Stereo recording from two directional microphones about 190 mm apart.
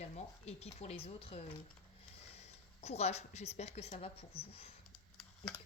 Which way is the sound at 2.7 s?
35° left (ahead or behind).